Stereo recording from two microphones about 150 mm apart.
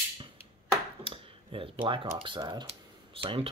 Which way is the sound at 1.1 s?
35° right (ahead or behind).